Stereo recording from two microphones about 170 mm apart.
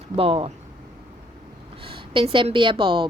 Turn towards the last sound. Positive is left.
turn(degrees=-30)  # may be behind; listen again after turning